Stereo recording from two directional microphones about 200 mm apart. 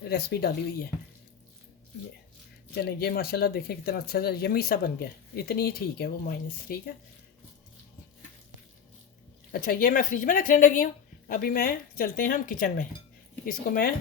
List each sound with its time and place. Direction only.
0.1 s speech: 55° left (ahead or behind)
2.7 s speech: 50° left (ahead or behind)
9.5 s speech: 45° left (ahead or behind)